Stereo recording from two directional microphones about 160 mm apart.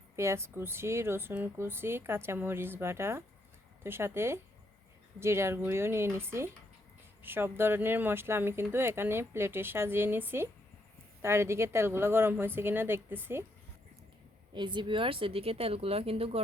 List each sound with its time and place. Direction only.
0.2 s speech: 15° right (ahead or behind)
14.5 s speech: 30° right (ahead or behind)